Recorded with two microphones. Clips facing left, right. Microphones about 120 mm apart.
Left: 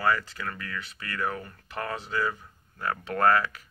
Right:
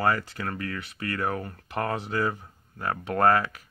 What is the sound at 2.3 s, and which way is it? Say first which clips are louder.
Speech: right 2 dB; 25° right (ahead or behind).